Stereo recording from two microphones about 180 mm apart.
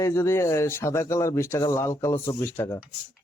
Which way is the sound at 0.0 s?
15° left (ahead or behind).